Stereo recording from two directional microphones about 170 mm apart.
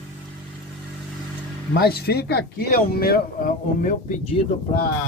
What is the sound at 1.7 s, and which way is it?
Speech, 70° left (ahead or behind).